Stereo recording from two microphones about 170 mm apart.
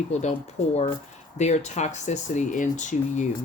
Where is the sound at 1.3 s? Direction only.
40° left (ahead or behind).